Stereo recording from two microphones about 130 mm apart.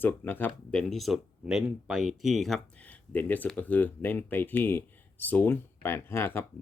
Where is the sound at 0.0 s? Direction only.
15° left (ahead or behind).